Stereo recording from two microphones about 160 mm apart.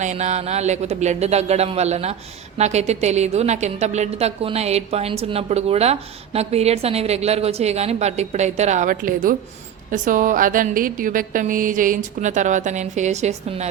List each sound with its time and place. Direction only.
0.0 s a woman's voice: 45° right (ahead or behind)